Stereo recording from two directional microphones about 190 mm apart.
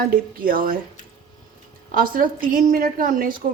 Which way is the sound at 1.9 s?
45° right (ahead or behind).